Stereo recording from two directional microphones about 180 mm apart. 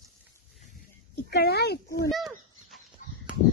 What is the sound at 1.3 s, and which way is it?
Speech, 60° left (ahead or behind).